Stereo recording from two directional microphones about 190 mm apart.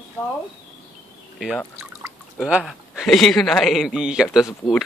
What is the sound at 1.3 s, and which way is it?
A man's voice, centre (ahead or behind).